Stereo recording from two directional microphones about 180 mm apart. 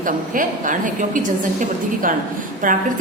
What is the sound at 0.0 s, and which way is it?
A woman's voice, 50° right (ahead or behind).